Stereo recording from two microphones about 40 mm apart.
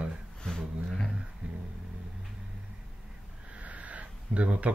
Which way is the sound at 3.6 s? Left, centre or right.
Right.